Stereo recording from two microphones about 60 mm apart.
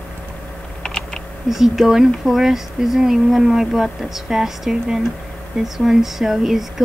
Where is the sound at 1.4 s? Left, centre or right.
Centre.